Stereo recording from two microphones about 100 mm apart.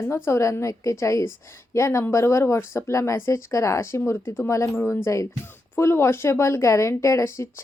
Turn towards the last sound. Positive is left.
turn(degrees=30)  # may be behind; listen again after turning